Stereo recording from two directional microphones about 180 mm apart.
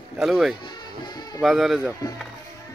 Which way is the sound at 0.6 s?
25° left (ahead or behind).